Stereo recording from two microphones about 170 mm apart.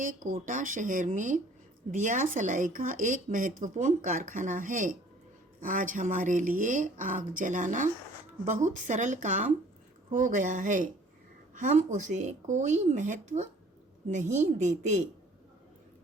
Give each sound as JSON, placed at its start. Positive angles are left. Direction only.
{"t": 0.0, "sound": "a woman's voice", "side_deg": -50}